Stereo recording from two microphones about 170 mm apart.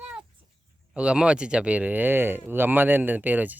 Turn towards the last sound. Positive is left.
turn(degrees=-10)  # may be behind; listen again after turning